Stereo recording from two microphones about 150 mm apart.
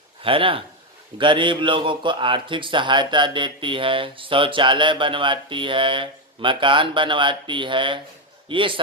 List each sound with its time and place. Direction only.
0.2 s speech: 35° right (ahead or behind)